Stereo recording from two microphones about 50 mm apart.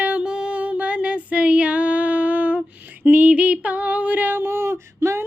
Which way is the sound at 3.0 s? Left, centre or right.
Right.